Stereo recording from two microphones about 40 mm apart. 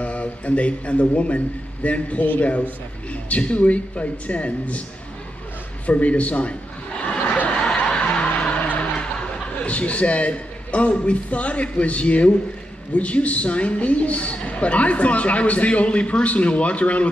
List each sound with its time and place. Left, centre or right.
0.0 s a man's voice: left
5.9 s a man's voice: left
7.1 s a sound: left
7.4 s snicker: left
9.7 s a man's voice: left